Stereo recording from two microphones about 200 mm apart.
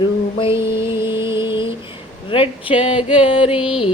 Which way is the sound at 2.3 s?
25° left (ahead or behind).